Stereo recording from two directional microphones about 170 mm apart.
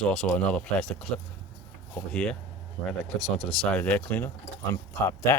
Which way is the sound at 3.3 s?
5° left (ahead or behind).